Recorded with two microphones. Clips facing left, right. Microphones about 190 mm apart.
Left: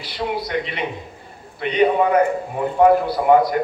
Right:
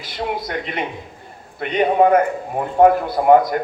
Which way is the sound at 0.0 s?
45° right (ahead or behind).